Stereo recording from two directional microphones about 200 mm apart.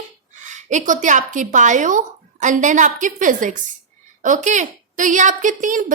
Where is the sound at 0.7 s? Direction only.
40° right (ahead or behind).